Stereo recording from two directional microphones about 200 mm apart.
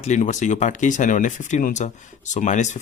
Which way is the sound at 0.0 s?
35° left (ahead or behind).